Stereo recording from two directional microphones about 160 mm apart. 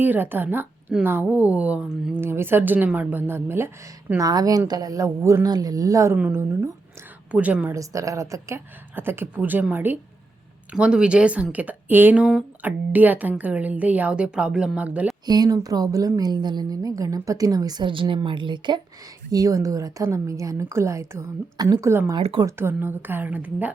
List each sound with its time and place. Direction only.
0.0 s a woman's voice: 10° right (ahead or behind)
15.3 s a woman's voice: 25° right (ahead or behind)
22.2 s speech: 35° right (ahead or behind)
22.4 s speech: 15° right (ahead or behind)